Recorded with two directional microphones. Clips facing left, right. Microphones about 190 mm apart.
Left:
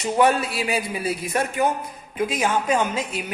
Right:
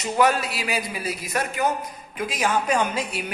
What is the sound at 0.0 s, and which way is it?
A woman's voice, 30° left (ahead or behind).